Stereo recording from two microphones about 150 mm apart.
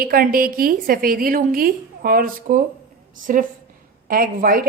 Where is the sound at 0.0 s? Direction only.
80° right.